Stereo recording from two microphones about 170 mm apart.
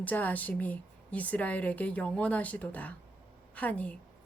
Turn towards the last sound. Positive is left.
turn(degrees=10)  # may be behind; listen again after turning